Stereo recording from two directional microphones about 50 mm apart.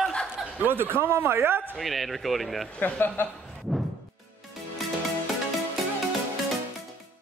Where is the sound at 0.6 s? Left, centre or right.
Right.